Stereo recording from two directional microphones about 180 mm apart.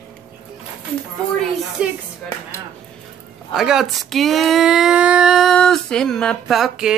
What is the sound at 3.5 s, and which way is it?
Speech, centre (ahead or behind).